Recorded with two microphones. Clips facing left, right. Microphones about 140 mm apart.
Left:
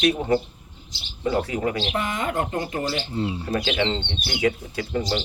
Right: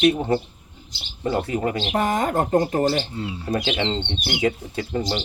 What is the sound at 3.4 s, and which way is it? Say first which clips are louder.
Speech: right 3 dB; 20° right (ahead or behind).